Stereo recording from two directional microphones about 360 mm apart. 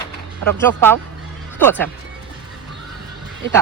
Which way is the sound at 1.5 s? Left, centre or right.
Centre.